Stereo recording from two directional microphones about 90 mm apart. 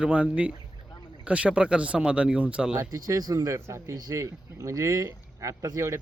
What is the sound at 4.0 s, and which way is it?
Speech, 45° right (ahead or behind).